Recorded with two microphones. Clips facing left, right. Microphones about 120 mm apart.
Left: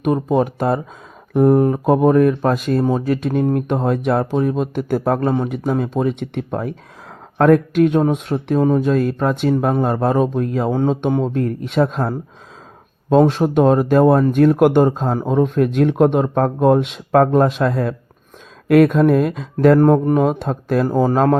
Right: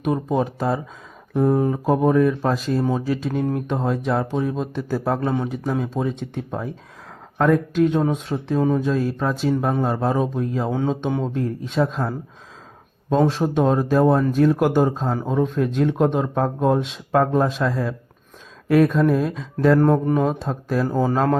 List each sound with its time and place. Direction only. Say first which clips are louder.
0.0 s speech: left 5 dB; 55° left (ahead or behind)
13.1 s speech: left 5 dB; 65° left (ahead or behind)
15.3 s speech: left 6 dB; 65° left (ahead or behind)
19.8 s speech: left 4 dB; 40° left (ahead or behind)
20.2 s speech: left 4 dB; 65° left (ahead or behind)
20.8 s speech: left 4 dB; 50° left (ahead or behind)